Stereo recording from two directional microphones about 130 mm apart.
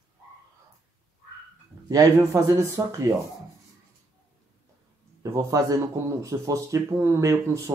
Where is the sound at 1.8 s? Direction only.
30° right (ahead or behind).